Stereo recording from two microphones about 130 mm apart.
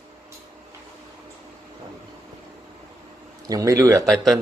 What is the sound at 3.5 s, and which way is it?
Speech, 25° right (ahead or behind).